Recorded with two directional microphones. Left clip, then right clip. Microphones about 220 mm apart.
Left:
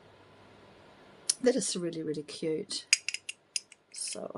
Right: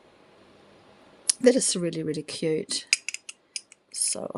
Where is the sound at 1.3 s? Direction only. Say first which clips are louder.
Right 7 dB; 40° right (ahead or behind).